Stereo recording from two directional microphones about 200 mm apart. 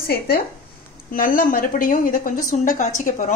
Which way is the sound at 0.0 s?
50° left (ahead or behind).